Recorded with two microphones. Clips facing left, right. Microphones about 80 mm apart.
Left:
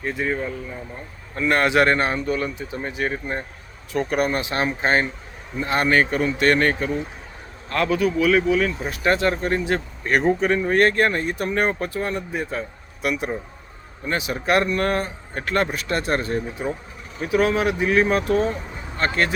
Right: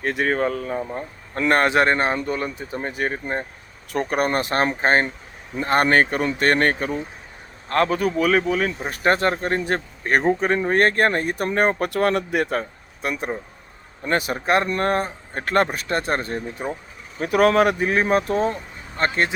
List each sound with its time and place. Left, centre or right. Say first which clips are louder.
0.0 s speech: right 4 dB; right
1.4 s speech: right 1 dB; right
4.8 s speech: right 2 dB; right
11.8 s speech: right 5 dB; right
13.0 s speech: left 2 dB; right
14.1 s speech: right 3 dB; right
14.3 s speech: left 4 dB; right
17.2 s speech: right 3 dB; right